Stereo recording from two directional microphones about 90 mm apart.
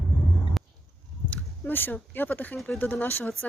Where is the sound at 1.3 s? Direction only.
20° left (ahead or behind).